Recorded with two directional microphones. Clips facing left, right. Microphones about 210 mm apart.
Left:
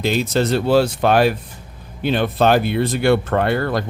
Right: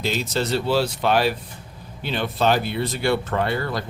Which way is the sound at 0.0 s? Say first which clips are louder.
Left 6 dB; 55° left (ahead or behind).